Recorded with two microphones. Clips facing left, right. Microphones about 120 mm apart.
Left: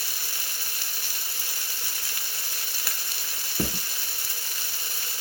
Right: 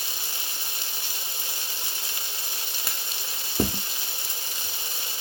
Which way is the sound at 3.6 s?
20° right (ahead or behind).